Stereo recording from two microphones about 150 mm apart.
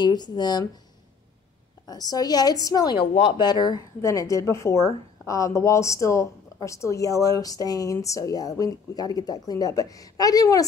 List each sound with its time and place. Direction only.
0.0 s a woman's voice: 30° left (ahead or behind)
1.9 s a woman's voice: 25° left (ahead or behind)